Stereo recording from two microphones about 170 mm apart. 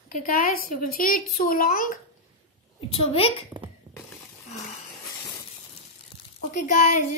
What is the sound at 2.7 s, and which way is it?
Speech, 30° left (ahead or behind).